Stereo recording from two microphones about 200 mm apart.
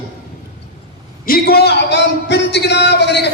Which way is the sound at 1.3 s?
50° left (ahead or behind).